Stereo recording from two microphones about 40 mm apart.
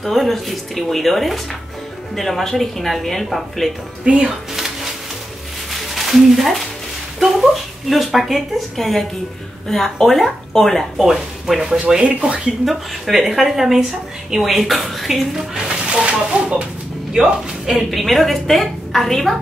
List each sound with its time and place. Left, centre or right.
0.0 s speech: centre
4.0 s speech: right
4.6 s music: centre
5.7 s a sound: centre
7.9 s speech: centre
11.0 s speech: centre
12.0 s speech: right
12.6 s speech: centre
15.5 s music: right
17.9 s speech: centre